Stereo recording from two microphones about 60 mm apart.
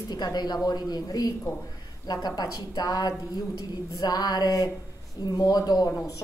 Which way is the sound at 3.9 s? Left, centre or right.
Left.